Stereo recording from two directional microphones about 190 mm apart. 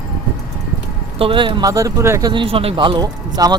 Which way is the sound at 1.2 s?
25° right (ahead or behind).